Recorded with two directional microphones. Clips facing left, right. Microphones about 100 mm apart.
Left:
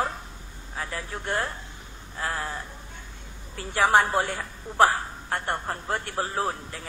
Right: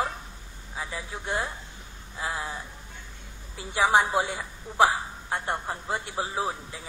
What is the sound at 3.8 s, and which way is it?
A woman's voice, 10° right (ahead or behind).